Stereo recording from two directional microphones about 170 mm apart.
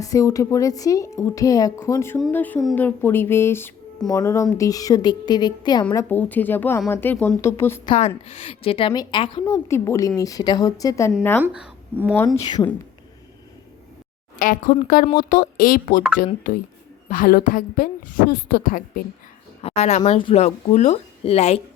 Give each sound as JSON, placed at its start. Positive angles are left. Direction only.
{"t": 0.0, "sound": "a woman's voice", "side_deg": 20}
{"t": 7.9, "sound": "a woman's voice", "side_deg": 40}
{"t": 9.5, "sound": "a woman's voice", "side_deg": 15}
{"t": 11.4, "sound": "speech", "side_deg": -10}
{"t": 14.3, "sound": "a woman's voice", "side_deg": 55}
{"t": 17.1, "sound": "a woman's voice", "side_deg": 55}
{"t": 19.6, "sound": "a woman's voice", "side_deg": 40}